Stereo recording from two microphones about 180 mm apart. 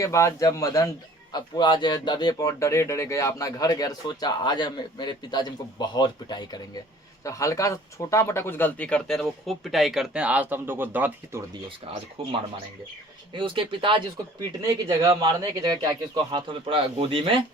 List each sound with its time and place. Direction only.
0.0 s speech: 15° left (ahead or behind); by 11.4 s 10° right (ahead or behind)
12.2 s a man's voice: 30° right (ahead or behind)